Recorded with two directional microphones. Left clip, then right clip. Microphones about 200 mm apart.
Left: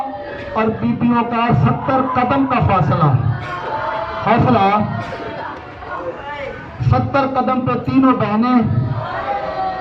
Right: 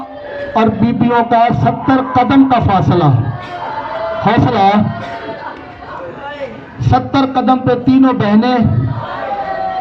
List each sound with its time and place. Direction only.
0.5 s speech: 50° right (ahead or behind)
4.3 s speech: 50° right (ahead or behind)
6.8 s speech: 50° right (ahead or behind)